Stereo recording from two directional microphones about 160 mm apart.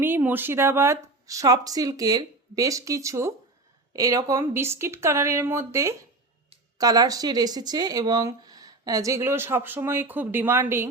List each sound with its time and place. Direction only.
0.0 s speech: 10° right (ahead or behind)